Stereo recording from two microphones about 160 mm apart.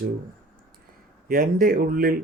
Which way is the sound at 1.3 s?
65° right (ahead or behind).